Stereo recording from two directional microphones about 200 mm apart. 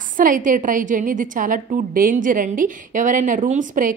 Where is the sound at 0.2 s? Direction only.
40° right (ahead or behind).